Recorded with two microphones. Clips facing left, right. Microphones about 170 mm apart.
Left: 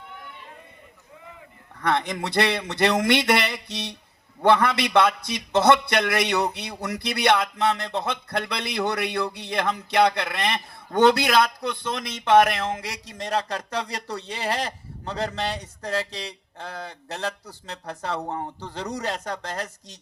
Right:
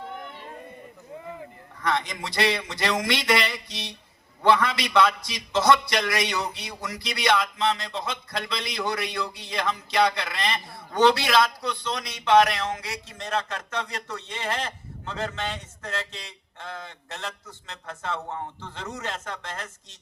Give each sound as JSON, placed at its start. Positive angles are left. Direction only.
{"t": 1.8, "sound": "a man's voice", "side_deg": 60}
{"t": 12.9, "sound": "speech", "side_deg": 35}